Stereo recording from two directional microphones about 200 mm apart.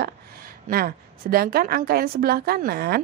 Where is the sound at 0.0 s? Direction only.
50° right (ahead or behind).